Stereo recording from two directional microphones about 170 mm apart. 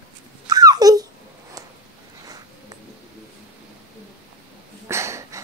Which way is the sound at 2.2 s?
20° right (ahead or behind).